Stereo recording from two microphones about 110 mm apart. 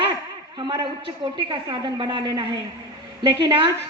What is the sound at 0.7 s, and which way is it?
A woman's voice, 45° right (ahead or behind).